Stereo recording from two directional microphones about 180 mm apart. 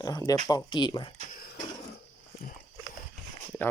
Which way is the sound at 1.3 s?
50° left (ahead or behind).